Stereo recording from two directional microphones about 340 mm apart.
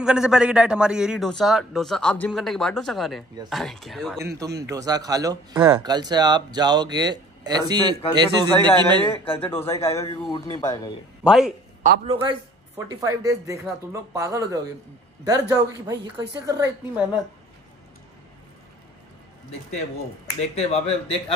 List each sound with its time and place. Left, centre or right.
0.0 s a man's voice: centre
9.1 s speech: centre
11.2 s a man's voice: centre
11.8 s a man's voice: centre
20.3 s speech: centre